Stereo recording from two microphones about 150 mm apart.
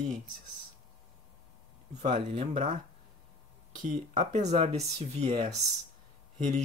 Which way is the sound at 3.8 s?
60° right (ahead or behind).